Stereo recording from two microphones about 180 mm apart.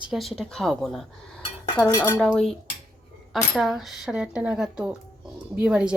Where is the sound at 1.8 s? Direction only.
20° left (ahead or behind).